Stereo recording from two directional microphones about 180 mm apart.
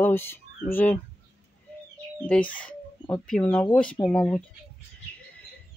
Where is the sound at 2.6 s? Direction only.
5° left (ahead or behind).